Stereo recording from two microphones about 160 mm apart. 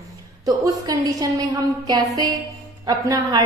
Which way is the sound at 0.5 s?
25° right (ahead or behind).